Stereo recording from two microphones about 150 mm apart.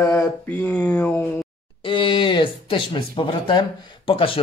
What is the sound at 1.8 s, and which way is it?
Speech, 35° left (ahead or behind).